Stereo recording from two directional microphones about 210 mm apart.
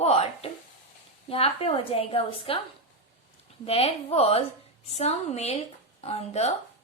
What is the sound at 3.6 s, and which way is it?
A woman's voice, 30° left (ahead or behind).